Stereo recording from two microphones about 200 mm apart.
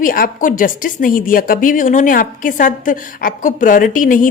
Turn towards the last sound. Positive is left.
turn(degrees=40)  # may be behind; listen again after turning